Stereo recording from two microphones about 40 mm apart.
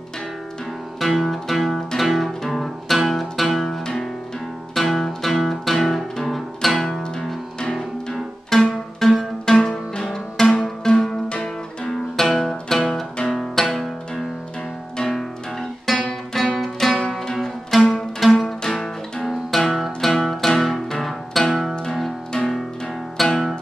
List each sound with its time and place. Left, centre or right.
0.9 s music: centre
8.1 s music: centre
11.9 s music: centre
18.6 s music: centre
19.2 s music: centre